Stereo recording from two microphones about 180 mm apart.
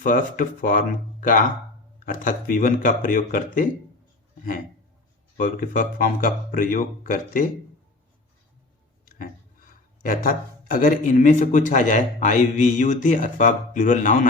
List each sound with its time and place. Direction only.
0.0 s speech: 45° left (ahead or behind)
5.4 s speech: 50° left (ahead or behind)
9.0 s speech: 50° left (ahead or behind)